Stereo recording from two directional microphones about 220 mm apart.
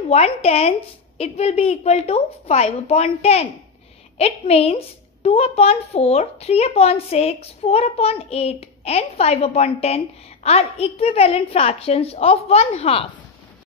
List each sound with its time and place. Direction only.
0.1 s a woman's voice: 30° left (ahead or behind)